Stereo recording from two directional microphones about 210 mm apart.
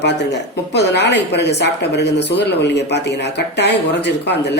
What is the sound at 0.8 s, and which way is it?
Speech, 55° left (ahead or behind).